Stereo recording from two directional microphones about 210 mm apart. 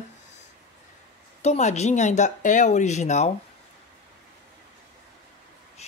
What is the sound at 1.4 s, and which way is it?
Speech, 30° left (ahead or behind).